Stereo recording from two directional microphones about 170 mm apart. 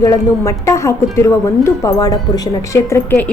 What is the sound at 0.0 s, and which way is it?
A woman's voice, 15° left (ahead or behind).